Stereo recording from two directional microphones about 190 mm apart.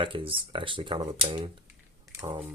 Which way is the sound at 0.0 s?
25° right (ahead or behind).